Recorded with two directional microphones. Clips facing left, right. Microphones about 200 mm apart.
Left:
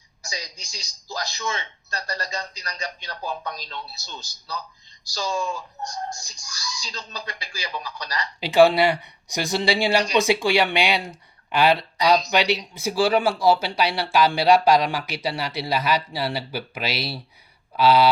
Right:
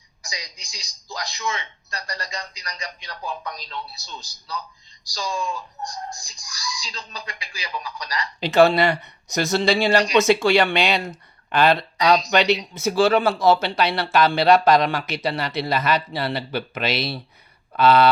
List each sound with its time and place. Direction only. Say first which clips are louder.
0.3 s a man's voice: left 2 dB; 30° left (ahead or behind)
5.3 s speech: left 1 dB; 45° left (ahead or behind)
5.8 s music: even; 30° left (ahead or behind)
6.5 s a man's voice: right 2 dB; 35° left (ahead or behind)
8.4 s speech: even; 10° left (ahead or behind)